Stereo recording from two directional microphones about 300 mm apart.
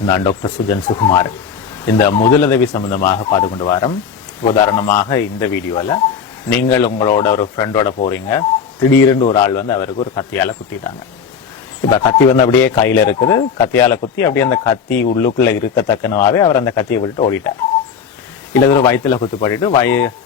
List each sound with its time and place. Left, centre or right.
0.1 s speech: centre
18.5 s speech: centre